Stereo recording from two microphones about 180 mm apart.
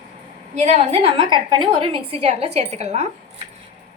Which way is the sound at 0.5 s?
40° right (ahead or behind).